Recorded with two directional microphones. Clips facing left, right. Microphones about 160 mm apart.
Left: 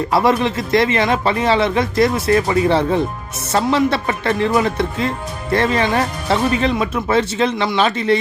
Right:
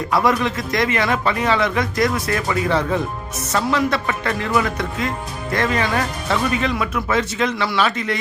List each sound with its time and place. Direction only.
0.1 s speech: 25° left (ahead or behind)